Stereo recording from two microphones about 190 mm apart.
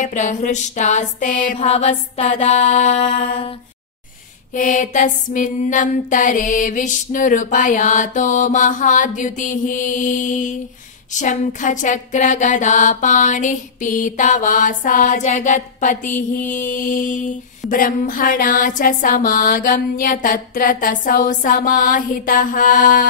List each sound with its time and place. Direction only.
0.0 s music: 40° left (ahead or behind)
4.6 s music: 45° left (ahead or behind)